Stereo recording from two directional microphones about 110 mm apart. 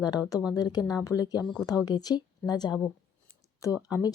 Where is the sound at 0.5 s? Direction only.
35° left (ahead or behind).